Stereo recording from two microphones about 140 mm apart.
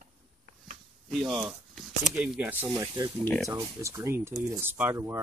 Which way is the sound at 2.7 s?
25° right (ahead or behind).